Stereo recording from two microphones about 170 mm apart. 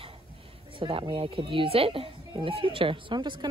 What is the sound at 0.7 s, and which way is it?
A woman's voice, 30° right (ahead or behind).